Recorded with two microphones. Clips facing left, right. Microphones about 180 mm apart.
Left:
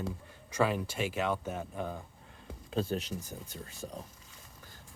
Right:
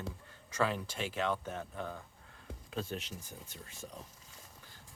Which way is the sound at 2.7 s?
35° left (ahead or behind).